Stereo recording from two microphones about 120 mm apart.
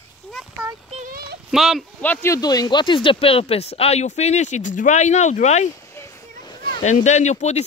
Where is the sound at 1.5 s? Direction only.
Centre (ahead or behind).